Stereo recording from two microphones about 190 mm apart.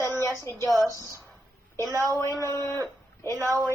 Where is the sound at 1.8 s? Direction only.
15° right (ahead or behind).